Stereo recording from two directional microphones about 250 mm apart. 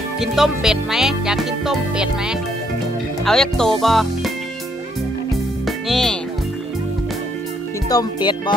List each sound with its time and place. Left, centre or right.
0.2 s music: centre
5.7 s music: centre
7.9 s speech: centre